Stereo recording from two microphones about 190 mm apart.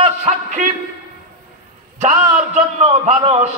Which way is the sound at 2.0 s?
35° right (ahead or behind).